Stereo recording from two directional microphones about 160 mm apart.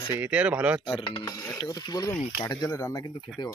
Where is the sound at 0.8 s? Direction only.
35° left (ahead or behind).